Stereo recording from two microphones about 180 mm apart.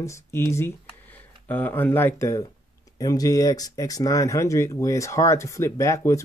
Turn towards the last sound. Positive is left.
turn(degrees=15)  # may be behind; listen again after turning